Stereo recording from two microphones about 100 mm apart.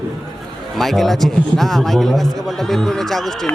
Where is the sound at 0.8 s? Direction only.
Centre (ahead or behind).